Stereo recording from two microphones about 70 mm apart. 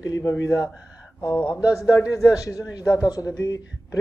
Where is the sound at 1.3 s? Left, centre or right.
Left.